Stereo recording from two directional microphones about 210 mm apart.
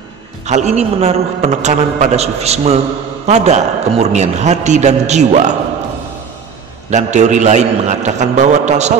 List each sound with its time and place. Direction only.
0.5 s a man's voice: 35° right (ahead or behind)
6.9 s a man's voice: 35° right (ahead or behind)